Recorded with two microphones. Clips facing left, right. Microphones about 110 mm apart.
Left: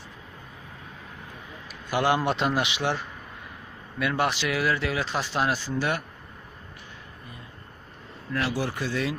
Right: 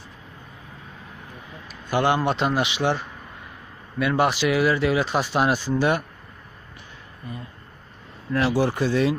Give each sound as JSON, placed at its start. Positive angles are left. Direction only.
{"t": 1.6, "sound": "a man's voice", "side_deg": 5}
{"t": 4.2, "sound": "speech", "side_deg": -5}
{"t": 8.3, "sound": "speech", "side_deg": -30}